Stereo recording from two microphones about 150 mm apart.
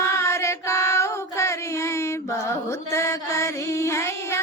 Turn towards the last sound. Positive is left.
turn(degrees=20)  # may be behind; listen again after turning